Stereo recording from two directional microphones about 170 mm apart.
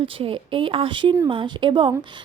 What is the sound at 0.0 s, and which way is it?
A woman's voice, 30° right (ahead or behind).